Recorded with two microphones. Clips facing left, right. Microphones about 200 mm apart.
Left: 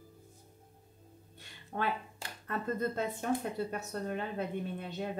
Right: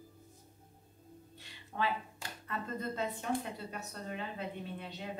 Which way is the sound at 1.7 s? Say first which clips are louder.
Left 1 dB; 45° left (ahead or behind).